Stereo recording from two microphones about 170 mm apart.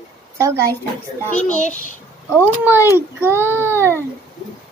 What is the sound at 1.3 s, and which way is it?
Speech, 45° left (ahead or behind).